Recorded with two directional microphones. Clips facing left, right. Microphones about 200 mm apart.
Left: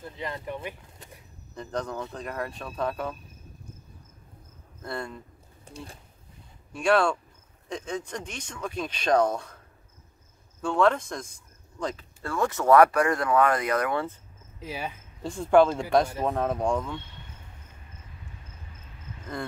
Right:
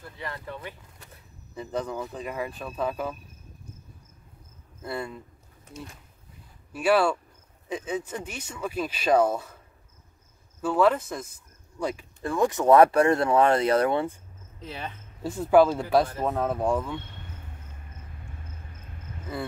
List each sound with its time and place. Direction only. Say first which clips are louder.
0.0 s speech: left 3 dB; 20° left (ahead or behind)
1.5 s speech: right 1 dB; 5° right (ahead or behind)
4.8 s speech: right 2 dB; 5° right (ahead or behind)
6.7 s speech: right 1 dB; 5° right (ahead or behind)
10.6 s speech: right 1 dB; 5° right (ahead or behind); by 14.0 s 30° right (ahead or behind)
14.6 s speech: left 2 dB; 10° left (ahead or behind)
15.2 s speech: right 1 dB; 5° right (ahead or behind)
19.3 s speech: right 1 dB; 5° right (ahead or behind)